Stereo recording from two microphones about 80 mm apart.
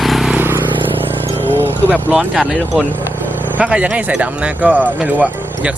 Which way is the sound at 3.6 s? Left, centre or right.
Centre.